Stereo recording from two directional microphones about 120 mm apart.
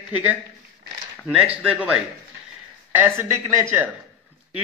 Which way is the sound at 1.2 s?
5° right (ahead or behind).